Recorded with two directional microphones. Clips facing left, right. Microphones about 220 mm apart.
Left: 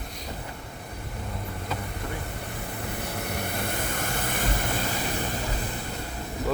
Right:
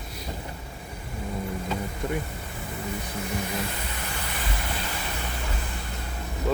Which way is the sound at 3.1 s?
65° left (ahead or behind).